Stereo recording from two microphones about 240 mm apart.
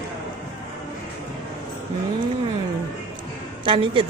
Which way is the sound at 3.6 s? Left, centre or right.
Right.